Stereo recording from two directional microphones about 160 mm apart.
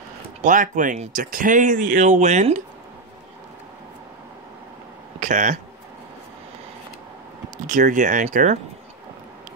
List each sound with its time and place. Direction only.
0.4 s speech: 55° right (ahead or behind)
5.2 s speech: 50° right (ahead or behind)
7.6 s speech: 50° right (ahead or behind)